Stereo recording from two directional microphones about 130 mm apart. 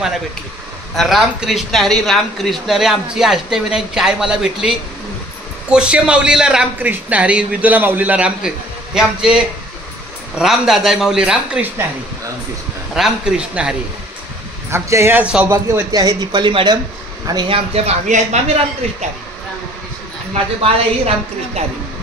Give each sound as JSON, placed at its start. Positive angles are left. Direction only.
{"t": 0.9, "sound": "a man's voice", "side_deg": 0}
{"t": 12.9, "sound": "speech", "side_deg": -5}
{"t": 14.7, "sound": "a man's voice", "side_deg": -20}
{"t": 17.7, "sound": "speech", "side_deg": -60}